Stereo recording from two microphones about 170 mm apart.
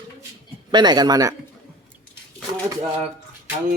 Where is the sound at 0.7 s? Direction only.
25° right (ahead or behind).